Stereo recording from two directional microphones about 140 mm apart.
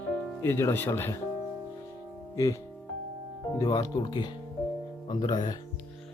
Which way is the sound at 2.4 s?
25° left (ahead or behind).